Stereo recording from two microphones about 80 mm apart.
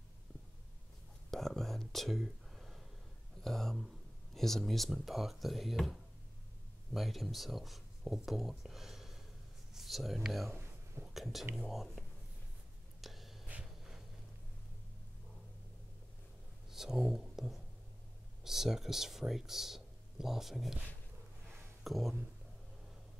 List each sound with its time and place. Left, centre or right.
1.3 s whispering: centre
3.4 s speech: centre
10.5 s a sound: right
11.1 s speech: centre
13.0 s a sound: centre
16.7 s speech: centre
21.8 s speech: centre